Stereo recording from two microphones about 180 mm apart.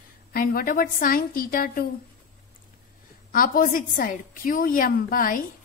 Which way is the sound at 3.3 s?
50° left (ahead or behind).